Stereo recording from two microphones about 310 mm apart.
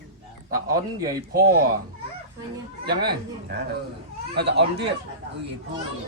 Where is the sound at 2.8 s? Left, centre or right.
Right.